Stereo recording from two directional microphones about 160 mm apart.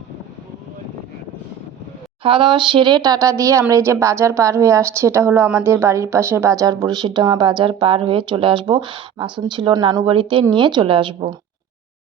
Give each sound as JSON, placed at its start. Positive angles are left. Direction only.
{"t": 2.2, "sound": "a woman's voice", "side_deg": -30}